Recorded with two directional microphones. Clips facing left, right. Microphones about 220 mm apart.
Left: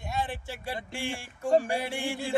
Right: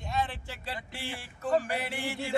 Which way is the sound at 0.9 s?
50° left (ahead or behind).